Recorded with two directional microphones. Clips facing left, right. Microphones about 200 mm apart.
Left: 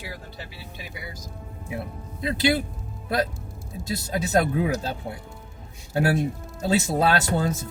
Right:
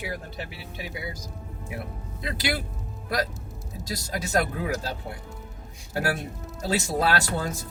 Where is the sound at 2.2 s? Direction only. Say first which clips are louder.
Left 7 dB; 25° left (ahead or behind).